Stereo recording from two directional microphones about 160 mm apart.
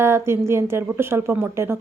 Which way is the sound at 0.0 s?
15° right (ahead or behind).